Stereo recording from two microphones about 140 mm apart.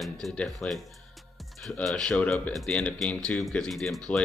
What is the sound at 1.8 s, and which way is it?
Speech, 5° left (ahead or behind).